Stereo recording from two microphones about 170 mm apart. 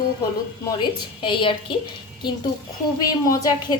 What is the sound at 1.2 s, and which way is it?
Speech, 30° left (ahead or behind).